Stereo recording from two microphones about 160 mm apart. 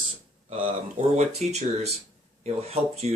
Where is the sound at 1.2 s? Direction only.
40° right (ahead or behind).